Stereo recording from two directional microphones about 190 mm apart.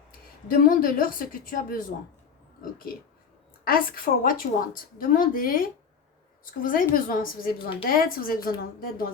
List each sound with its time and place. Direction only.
0.5 s a woman's voice: 50° left (ahead or behind)